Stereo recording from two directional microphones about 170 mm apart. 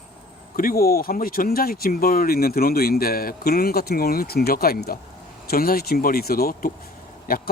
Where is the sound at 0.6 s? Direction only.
60° left (ahead or behind).